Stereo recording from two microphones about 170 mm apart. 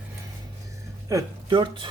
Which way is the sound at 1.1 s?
20° right (ahead or behind).